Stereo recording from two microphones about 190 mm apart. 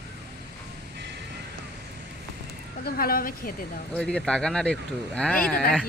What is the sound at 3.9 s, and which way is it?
Speech, 5° left (ahead or behind).